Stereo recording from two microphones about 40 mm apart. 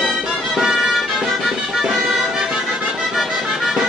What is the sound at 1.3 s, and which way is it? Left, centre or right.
Music, centre.